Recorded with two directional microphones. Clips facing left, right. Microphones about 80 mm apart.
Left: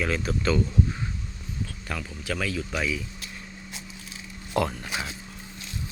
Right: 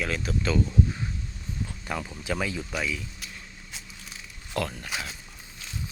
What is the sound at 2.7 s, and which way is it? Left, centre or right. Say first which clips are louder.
Speech: left 3 dB; centre.